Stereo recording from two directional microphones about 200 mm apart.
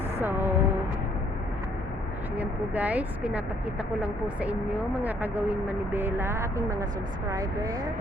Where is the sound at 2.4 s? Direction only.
5° right (ahead or behind).